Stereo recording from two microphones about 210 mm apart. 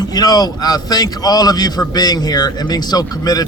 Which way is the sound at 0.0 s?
20° left (ahead or behind).